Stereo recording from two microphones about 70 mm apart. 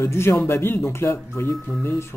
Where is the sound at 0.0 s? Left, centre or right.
Left.